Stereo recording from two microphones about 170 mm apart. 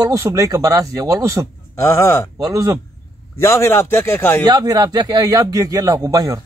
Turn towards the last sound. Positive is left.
turn(degrees=-20)  # may be behind; listen again after turning